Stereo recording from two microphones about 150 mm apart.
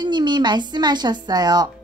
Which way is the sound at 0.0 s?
30° right (ahead or behind).